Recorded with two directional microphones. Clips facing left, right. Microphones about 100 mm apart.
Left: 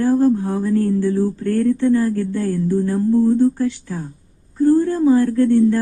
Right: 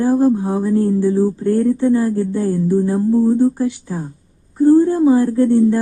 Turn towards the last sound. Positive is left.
turn(degrees=-15)  # may be behind; listen again after turning